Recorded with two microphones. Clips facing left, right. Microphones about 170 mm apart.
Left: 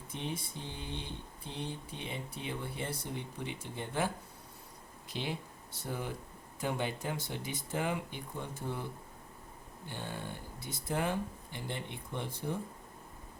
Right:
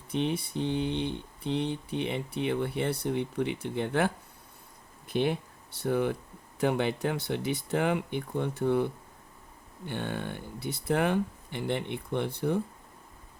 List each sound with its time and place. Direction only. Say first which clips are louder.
0.1 s speech: right 11 dB; 70° right (ahead or behind)
5.0 s speech: right 11 dB; 55° right (ahead or behind)